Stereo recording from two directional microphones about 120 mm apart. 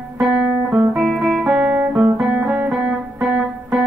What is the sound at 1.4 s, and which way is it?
Music, 10° right (ahead or behind).